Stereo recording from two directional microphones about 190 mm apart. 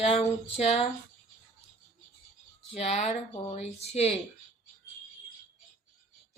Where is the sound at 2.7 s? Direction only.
35° left (ahead or behind).